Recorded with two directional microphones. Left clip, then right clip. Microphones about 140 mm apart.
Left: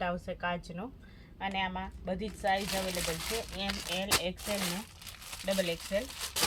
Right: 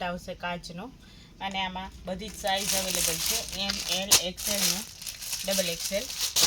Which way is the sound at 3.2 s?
Centre (ahead or behind).